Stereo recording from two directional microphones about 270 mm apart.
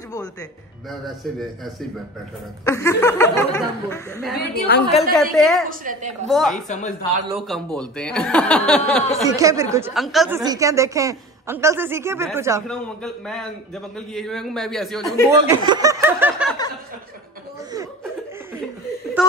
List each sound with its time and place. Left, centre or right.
1.0 s a man's voice: centre
2.6 s chuckle: centre
4.4 s a woman's voice: left
5.1 s a man's voice: centre
5.7 s a woman's voice: right
6.2 s a man's voice: centre
6.7 s a man's voice: left
7.3 s a man's voice: centre
9.2 s a woman's voice: centre
10.4 s a woman's voice: centre
12.6 s a man's voice: centre
15.4 s snicker: centre
19.2 s a sound: centre